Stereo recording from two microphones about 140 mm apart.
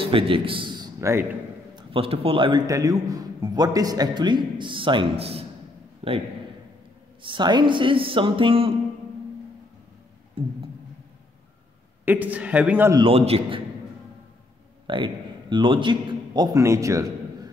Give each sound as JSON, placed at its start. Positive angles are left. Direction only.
{"t": 0.0, "sound": "a man's voice", "side_deg": -40}
{"t": 1.8, "sound": "a man's voice", "side_deg": -40}
{"t": 7.2, "sound": "a man's voice", "side_deg": -35}
{"t": 10.4, "sound": "a man's voice", "side_deg": -40}
{"t": 12.0, "sound": "a man's voice", "side_deg": -10}
{"t": 13.1, "sound": "a man's voice", "side_deg": -45}
{"t": 14.9, "sound": "a man's voice", "side_deg": -35}
{"t": 16.5, "sound": "a man's voice", "side_deg": -20}